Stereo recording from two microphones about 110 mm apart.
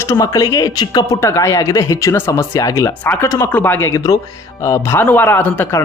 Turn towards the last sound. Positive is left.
turn(degrees=20)  # may be behind; listen again after turning